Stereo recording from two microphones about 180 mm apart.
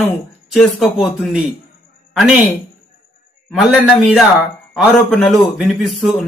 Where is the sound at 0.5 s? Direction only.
Centre (ahead or behind).